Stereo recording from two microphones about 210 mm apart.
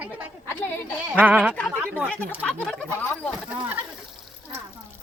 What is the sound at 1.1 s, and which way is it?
Speech, 5° right (ahead or behind).